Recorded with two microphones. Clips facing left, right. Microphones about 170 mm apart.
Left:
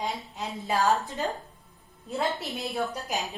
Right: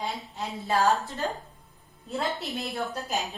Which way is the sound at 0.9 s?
15° left (ahead or behind).